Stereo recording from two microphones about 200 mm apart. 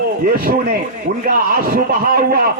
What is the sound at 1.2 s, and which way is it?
A man's voice, 45° right (ahead or behind).